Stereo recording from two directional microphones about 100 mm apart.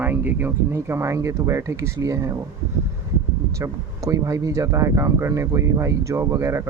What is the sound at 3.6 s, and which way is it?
Speech, 30° right (ahead or behind).